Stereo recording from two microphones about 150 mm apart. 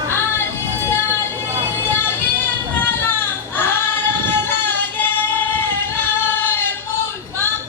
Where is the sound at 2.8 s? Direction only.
15° left (ahead or behind).